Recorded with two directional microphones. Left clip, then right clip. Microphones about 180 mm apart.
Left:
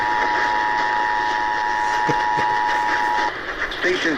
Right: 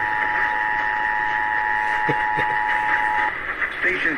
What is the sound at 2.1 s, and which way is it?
Vehicle, 40° left (ahead or behind).